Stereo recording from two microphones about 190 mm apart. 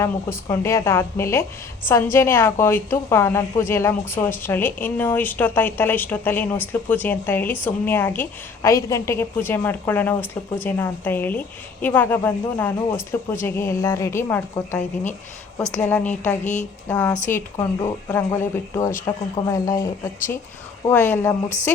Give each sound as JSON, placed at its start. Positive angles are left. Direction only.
{"t": 0.0, "sound": "a woman's voice", "side_deg": 15}
{"t": 15.8, "sound": "a woman's voice", "side_deg": 10}